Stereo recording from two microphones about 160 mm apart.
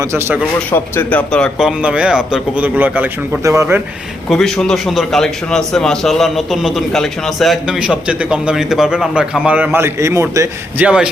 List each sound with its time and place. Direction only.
0.0 s speech: 15° right (ahead or behind)
0.7 s speech: 10° left (ahead or behind); by 3.8 s 20° right (ahead or behind)
4.3 s a man's voice: centre (ahead or behind); by 10.8 s 20° right (ahead or behind)
10.8 s a man's voice: 5° right (ahead or behind)